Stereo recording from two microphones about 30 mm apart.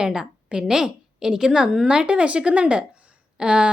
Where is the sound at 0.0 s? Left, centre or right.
Right.